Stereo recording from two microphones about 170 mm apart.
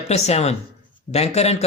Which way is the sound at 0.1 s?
40° left (ahead or behind).